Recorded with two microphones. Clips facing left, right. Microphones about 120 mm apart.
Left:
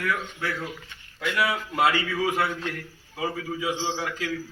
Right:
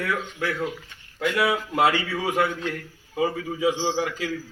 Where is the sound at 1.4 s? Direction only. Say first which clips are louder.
Right 2 dB; 20° right (ahead or behind).